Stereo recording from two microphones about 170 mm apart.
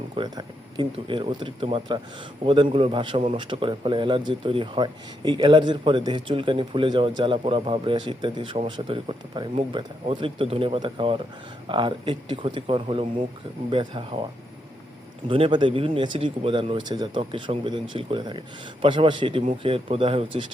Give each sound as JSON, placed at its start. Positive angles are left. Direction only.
{"t": 0.2, "sound": "a man's voice", "side_deg": -25}
{"t": 15.3, "sound": "a man's voice", "side_deg": -30}